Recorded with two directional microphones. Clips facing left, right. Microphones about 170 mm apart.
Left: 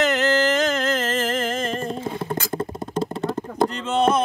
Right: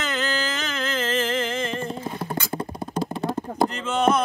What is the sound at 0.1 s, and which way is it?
Music, 40° left (ahead or behind).